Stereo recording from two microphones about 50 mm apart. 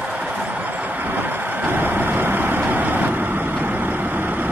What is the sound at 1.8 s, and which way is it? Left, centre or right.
Vehicle, right.